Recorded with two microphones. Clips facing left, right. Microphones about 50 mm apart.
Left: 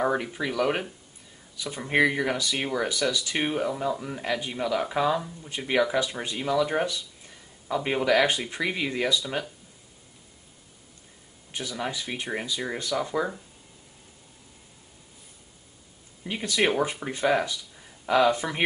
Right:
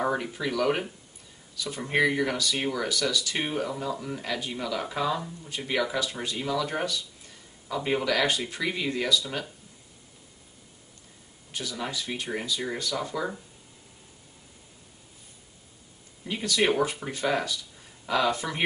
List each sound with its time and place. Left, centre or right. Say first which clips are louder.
0.0 s speech: left 2 dB; centre
6.6 s a sound: left 4 dB; centre
8.0 s speech: left 3 dB; left
11.5 s speech: left 2 dB; left
16.3 s speech: even; centre